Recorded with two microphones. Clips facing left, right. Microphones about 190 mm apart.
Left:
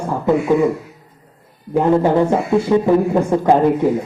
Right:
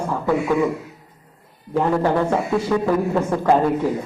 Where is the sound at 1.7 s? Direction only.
20° left (ahead or behind).